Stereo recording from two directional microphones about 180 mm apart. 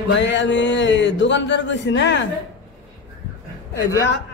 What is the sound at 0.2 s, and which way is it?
Speech, 85° left.